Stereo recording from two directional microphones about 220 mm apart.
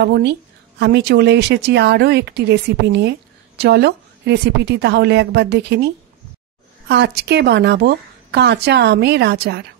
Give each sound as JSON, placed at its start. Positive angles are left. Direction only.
{"t": 0.0, "sound": "a woman's voice", "side_deg": -50}
{"t": 6.9, "sound": "a woman's voice", "side_deg": -50}